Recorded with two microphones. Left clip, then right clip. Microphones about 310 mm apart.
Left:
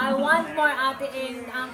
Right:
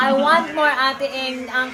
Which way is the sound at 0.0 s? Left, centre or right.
Centre.